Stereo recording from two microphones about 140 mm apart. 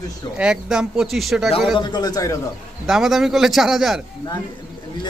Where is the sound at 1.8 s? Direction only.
30° left (ahead or behind).